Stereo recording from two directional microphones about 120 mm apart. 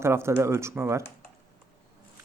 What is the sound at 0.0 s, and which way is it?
Speech, 20° right (ahead or behind).